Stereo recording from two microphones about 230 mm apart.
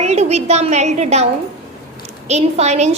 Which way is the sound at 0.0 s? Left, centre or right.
Right.